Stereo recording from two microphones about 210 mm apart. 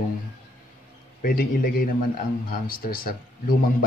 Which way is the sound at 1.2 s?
45° left (ahead or behind).